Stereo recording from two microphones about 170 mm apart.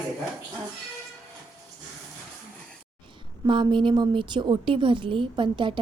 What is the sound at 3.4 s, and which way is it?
A woman's voice, 30° right (ahead or behind).